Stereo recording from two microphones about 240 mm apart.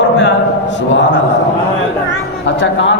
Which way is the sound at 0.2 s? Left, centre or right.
Left.